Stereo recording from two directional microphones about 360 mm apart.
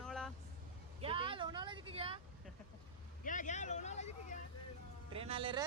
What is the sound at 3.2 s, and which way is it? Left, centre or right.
Speech, left.